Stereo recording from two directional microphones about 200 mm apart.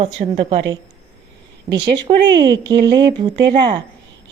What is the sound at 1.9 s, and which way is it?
Speech, 20° right (ahead or behind).